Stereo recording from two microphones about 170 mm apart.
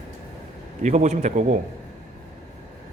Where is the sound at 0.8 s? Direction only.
45° right (ahead or behind).